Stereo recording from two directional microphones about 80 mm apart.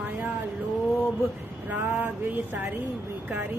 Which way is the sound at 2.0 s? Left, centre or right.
Right.